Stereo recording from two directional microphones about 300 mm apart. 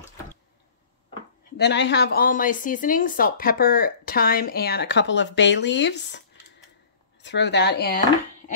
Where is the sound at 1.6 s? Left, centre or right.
Left.